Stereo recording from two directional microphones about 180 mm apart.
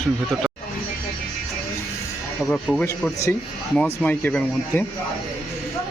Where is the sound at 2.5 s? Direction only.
5° left (ahead or behind).